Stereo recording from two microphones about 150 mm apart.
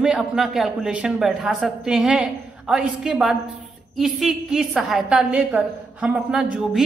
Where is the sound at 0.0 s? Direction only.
5° right (ahead or behind).